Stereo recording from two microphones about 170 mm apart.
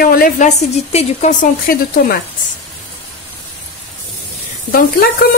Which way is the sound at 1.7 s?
60° left (ahead or behind).